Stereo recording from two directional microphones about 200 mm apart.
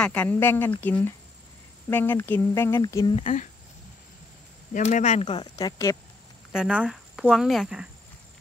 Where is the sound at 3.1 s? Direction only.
35° left (ahead or behind).